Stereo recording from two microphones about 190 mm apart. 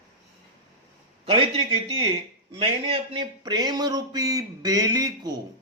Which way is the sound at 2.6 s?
30° right (ahead or behind).